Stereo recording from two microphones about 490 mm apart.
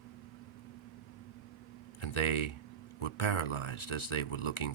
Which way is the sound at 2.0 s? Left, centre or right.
Left.